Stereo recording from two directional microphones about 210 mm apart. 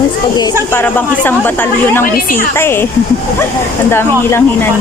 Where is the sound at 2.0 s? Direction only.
40° left (ahead or behind).